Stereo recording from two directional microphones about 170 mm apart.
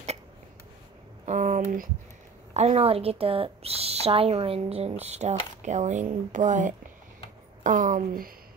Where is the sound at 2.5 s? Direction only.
40° right (ahead or behind).